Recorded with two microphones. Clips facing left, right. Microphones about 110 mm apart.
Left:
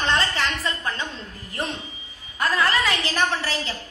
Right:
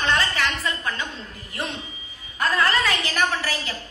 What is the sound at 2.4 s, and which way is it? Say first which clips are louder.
A woman's voice: even; 15° left (ahead or behind).